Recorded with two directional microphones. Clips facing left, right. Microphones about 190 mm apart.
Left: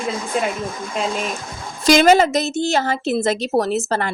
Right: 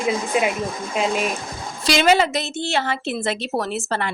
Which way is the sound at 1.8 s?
45° left (ahead or behind).